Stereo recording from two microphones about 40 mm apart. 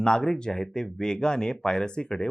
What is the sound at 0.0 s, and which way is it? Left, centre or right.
Speech, centre.